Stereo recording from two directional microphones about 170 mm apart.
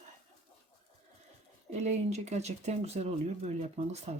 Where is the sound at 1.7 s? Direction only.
40° right (ahead or behind).